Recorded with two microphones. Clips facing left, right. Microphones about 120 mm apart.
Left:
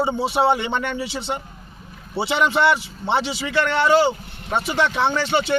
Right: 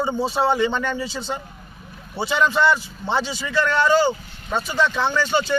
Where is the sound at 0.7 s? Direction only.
70° left (ahead or behind).